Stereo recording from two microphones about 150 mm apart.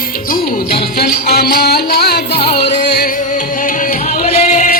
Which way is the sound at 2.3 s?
35° left (ahead or behind).